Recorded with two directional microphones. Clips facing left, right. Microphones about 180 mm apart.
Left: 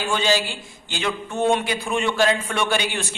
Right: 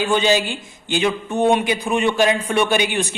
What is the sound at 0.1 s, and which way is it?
A man's voice, 20° right (ahead or behind).